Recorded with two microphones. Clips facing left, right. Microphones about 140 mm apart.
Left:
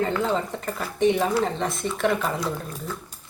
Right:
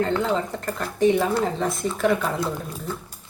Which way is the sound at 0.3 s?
Centre (ahead or behind).